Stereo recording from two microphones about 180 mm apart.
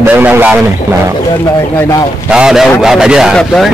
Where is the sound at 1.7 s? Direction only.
15° left (ahead or behind).